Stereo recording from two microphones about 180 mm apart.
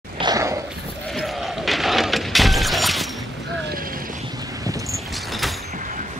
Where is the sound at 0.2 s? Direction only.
20° right (ahead or behind).